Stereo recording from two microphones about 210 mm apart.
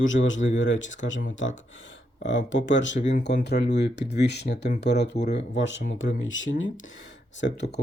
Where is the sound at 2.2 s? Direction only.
60° left (ahead or behind).